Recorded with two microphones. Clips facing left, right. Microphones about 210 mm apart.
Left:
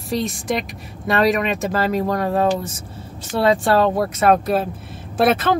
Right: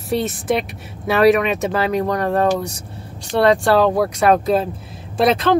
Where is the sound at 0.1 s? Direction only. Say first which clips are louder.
Right 3 dB; centre (ahead or behind).